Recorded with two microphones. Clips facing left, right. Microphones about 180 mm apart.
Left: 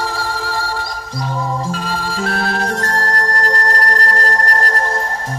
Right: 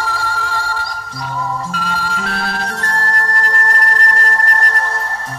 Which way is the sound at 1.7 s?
35° left (ahead or behind).